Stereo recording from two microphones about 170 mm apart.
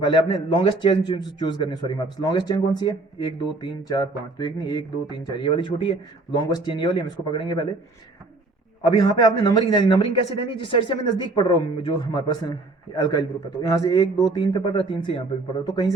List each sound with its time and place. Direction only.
0.0 s a man's voice: 30° left (ahead or behind)
9.0 s a man's voice: 25° left (ahead or behind)